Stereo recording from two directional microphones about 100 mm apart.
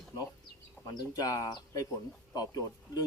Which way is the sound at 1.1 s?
35° left (ahead or behind).